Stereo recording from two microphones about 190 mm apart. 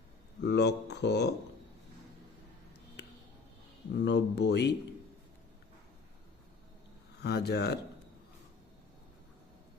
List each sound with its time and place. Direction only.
0.4 s speech: 60° left (ahead or behind)
3.9 s speech: 65° left (ahead or behind)
7.2 s speech: 60° left (ahead or behind)